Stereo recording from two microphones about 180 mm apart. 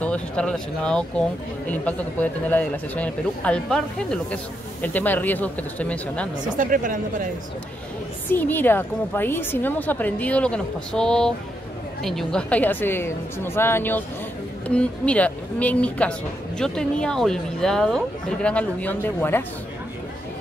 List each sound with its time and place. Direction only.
0.0 s a woman's voice: 5° left (ahead or behind)
6.5 s speech: 50° right (ahead or behind)
8.3 s a woman's voice: 10° left (ahead or behind)